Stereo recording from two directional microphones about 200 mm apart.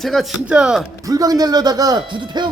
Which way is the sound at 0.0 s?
Centre (ahead or behind).